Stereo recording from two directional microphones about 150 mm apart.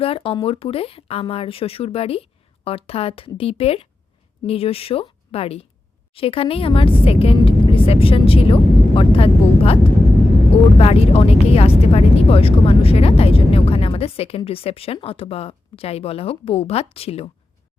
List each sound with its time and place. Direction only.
0.0 s speech: 40° left (ahead or behind)
6.1 s vehicle: 40° left (ahead or behind)
10.8 s speech: 40° left (ahead or behind)